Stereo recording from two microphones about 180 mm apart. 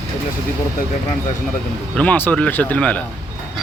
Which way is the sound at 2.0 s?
10° left (ahead or behind).